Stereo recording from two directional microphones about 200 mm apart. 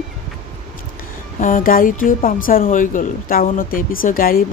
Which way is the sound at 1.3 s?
40° left (ahead or behind).